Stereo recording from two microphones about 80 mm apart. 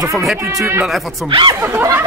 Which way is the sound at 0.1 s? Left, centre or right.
Centre.